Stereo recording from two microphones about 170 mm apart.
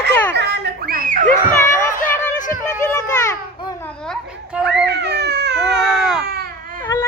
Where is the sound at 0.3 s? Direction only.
75° right (ahead or behind); by 1.3 s 50° right (ahead or behind).